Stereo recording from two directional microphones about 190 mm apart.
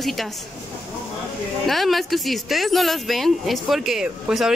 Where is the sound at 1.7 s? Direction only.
Centre (ahead or behind).